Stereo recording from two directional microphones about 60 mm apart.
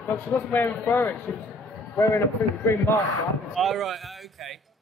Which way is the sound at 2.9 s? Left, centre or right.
Left.